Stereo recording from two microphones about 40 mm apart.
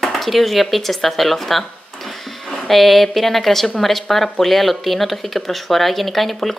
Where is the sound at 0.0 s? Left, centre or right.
Centre.